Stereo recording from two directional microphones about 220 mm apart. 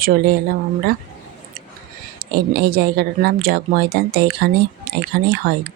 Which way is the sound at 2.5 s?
45° right (ahead or behind).